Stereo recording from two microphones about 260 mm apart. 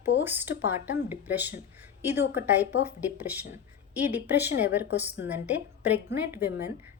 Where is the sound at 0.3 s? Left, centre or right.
Centre.